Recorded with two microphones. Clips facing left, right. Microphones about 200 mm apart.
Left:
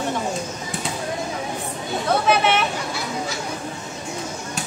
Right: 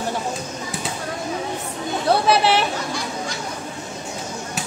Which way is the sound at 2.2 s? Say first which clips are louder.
Even; 35° right (ahead or behind).